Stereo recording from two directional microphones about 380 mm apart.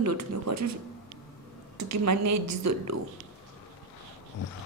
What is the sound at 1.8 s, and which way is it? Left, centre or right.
A woman's voice, right.